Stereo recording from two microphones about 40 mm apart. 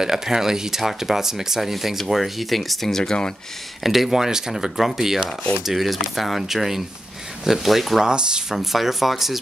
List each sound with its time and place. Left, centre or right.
0.0 s speech: centre
3.8 s speech: centre
8.0 s speech: right
8.5 s speech: centre